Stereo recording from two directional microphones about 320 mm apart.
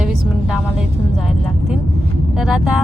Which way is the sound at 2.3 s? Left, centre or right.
Centre.